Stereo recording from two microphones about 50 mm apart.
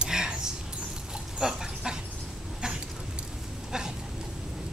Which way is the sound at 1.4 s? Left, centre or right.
Centre.